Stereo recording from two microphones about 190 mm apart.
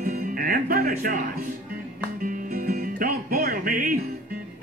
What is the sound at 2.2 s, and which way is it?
Music, 50° right (ahead or behind).